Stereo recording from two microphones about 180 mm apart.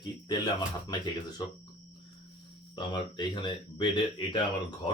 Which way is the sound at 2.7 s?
25° left (ahead or behind).